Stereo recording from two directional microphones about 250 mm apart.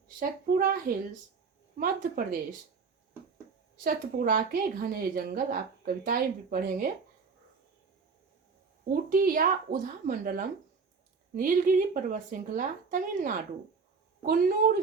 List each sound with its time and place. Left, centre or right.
0.2 s a woman's voice: right
3.8 s a woman's voice: right
9.0 s a woman's voice: right